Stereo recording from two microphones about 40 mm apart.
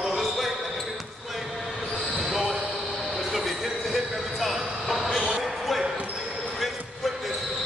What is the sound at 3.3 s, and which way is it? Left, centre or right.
Vehicle, centre.